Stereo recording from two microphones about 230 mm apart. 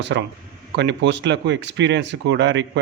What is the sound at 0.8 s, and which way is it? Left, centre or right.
A man's voice, right.